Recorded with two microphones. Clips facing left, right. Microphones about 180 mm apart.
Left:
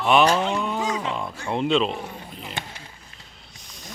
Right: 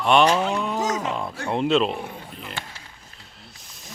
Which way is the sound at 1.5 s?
Centre (ahead or behind).